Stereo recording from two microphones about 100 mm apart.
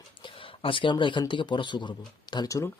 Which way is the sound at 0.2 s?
60° left (ahead or behind).